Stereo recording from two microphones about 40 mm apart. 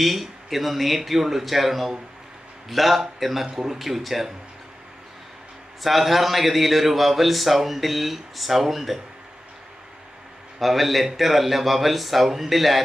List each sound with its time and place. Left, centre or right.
0.0 s a man's voice: centre
5.8 s a man's voice: centre
10.6 s a man's voice: centre